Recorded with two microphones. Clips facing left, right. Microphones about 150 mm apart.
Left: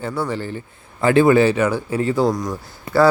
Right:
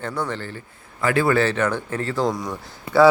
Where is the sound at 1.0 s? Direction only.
25° left (ahead or behind).